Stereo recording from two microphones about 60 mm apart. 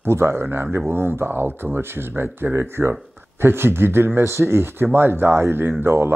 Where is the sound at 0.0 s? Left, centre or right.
Right.